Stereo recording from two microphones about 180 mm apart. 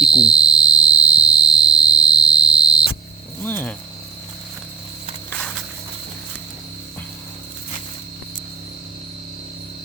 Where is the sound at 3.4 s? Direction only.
10° left (ahead or behind).